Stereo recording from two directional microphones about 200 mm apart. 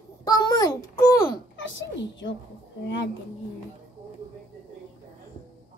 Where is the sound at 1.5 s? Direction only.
65° left (ahead or behind).